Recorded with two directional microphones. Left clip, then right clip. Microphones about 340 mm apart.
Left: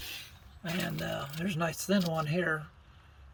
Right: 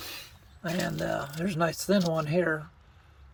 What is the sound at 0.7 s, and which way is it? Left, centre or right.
Speech, centre.